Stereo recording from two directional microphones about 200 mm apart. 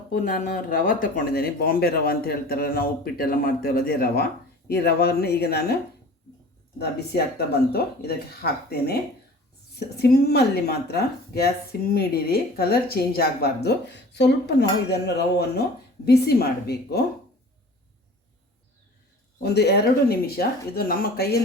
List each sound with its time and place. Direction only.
0.1 s speech: 45° left (ahead or behind)
6.7 s speech: 55° left (ahead or behind)
9.7 s speech: 55° left (ahead or behind)
19.4 s speech: 55° left (ahead or behind)